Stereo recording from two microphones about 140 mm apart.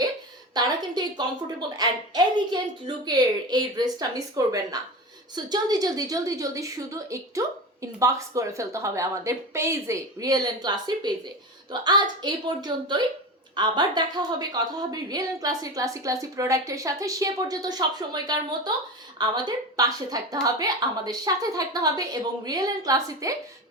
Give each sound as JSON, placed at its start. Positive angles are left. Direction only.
{"t": 0.5, "sound": "a woman's voice", "side_deg": -30}